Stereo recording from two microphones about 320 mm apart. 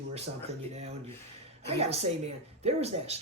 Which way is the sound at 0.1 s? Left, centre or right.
Centre.